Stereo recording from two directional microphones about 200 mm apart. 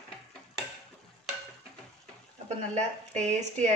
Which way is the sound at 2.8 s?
35° right (ahead or behind).